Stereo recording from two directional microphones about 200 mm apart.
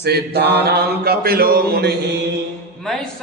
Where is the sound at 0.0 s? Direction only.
55° right (ahead or behind).